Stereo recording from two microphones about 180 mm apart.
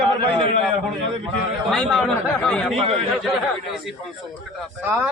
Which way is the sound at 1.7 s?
Centre (ahead or behind).